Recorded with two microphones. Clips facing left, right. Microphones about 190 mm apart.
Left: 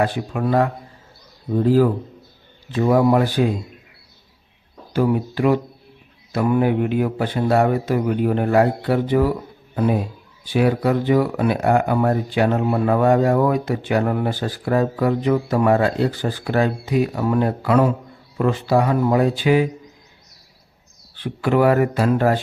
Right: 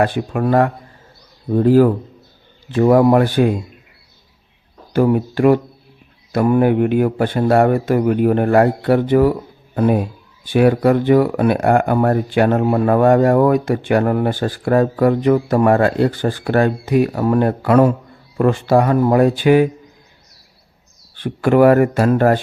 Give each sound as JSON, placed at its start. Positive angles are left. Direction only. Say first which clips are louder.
{"t": 0.0, "sound": "speech", "louder": "right 4 dB", "side_deg": -55}
{"t": 4.9, "sound": "speech", "louder": "right 4 dB", "side_deg": -50}
{"t": 21.2, "sound": "speech", "louder": "right 5 dB", "side_deg": -45}